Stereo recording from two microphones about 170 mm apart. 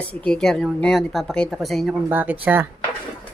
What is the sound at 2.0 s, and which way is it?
Speech, 10° right (ahead or behind).